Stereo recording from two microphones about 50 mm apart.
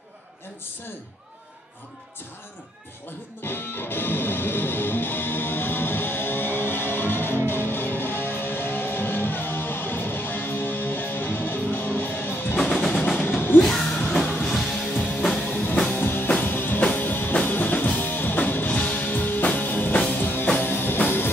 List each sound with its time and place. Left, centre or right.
3.4 s music: left
12.9 s a sound: centre
14.5 s music: centre
15.0 s music: centre
15.3 s music: left